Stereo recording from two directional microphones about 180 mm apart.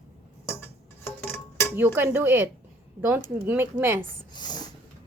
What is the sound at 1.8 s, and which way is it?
A woman's voice, 10° right (ahead or behind).